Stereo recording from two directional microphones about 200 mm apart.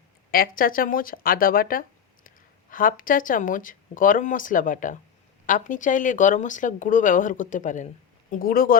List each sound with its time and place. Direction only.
0.3 s speech: 45° left (ahead or behind)